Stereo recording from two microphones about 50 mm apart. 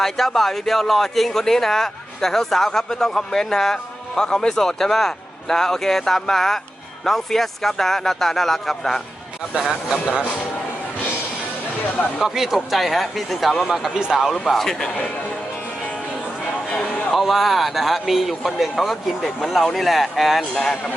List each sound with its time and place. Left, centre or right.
0.0 s a man's voice: centre
12.2 s a man's voice: centre
13.9 s speech: centre
14.4 s speech: centre
16.7 s a man's voice: centre